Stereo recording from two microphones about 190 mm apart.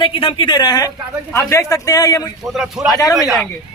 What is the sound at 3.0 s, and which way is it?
Speech, 15° left (ahead or behind).